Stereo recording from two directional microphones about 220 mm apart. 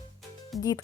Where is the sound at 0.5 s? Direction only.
Centre (ahead or behind).